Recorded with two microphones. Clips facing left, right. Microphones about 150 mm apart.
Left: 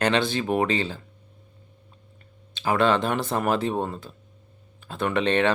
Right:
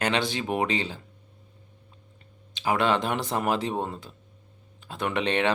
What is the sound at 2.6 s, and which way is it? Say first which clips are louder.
Speech: left 3 dB; 15° right (ahead or behind).